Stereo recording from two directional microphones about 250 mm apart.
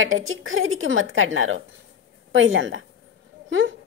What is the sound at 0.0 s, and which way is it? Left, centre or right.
A woman's voice, right.